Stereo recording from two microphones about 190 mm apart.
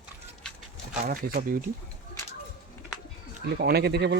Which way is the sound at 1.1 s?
45° right (ahead or behind).